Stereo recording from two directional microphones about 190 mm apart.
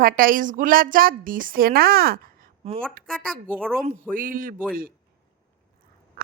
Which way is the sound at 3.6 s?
5° left (ahead or behind).